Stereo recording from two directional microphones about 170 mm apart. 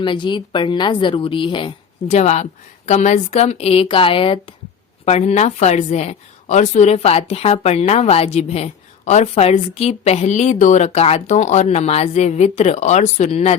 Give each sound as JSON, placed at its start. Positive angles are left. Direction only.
{"t": 0.0, "sound": "a woman's voice", "side_deg": 30}